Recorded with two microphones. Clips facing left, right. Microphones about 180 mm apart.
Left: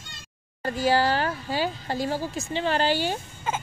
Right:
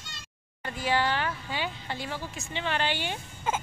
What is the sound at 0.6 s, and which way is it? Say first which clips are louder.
Speech: left 6 dB; 40° left (ahead or behind).